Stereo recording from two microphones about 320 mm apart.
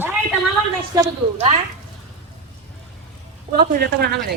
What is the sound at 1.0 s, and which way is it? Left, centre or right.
Speech, centre.